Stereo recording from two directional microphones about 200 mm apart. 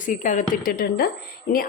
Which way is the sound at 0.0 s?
40° left (ahead or behind).